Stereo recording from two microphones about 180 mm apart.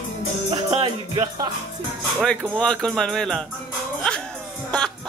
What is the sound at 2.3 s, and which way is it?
Speech, 5° right (ahead or behind).